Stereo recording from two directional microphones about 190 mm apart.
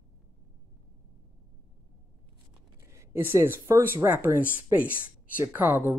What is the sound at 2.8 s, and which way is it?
Speech, 15° right (ahead or behind).